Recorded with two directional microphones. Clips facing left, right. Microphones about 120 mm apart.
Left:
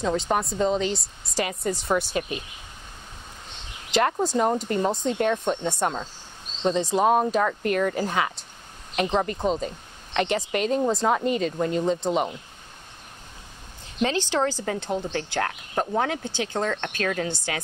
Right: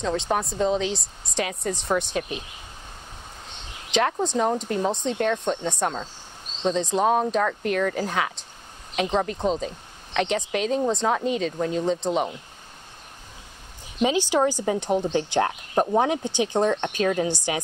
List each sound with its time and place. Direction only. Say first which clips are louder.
0.0 s speech: left 1 dB; centre (ahead or behind)
3.9 s speech: left 1 dB; 5° left (ahead or behind)
14.0 s speech: right 3 dB; 10° right (ahead or behind)